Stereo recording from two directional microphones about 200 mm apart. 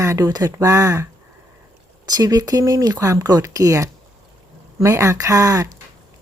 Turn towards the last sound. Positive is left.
turn(degrees=-15)  # may be behind; listen again after turning